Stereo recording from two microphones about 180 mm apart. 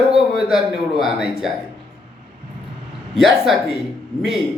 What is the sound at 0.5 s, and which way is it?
Speech, 25° left (ahead or behind).